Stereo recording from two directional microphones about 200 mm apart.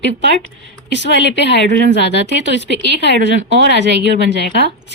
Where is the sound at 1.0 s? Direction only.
60° left (ahead or behind).